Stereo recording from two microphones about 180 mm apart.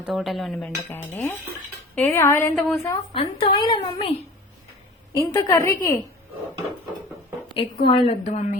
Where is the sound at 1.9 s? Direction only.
10° left (ahead or behind).